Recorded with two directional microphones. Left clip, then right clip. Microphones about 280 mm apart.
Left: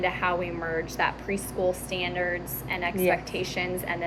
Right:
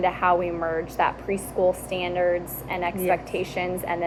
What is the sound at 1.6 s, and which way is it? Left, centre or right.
Speech, right.